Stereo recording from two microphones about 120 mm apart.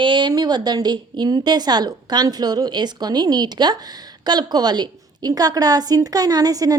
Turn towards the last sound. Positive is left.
turn(degrees=-30)  # may be behind; listen again after turning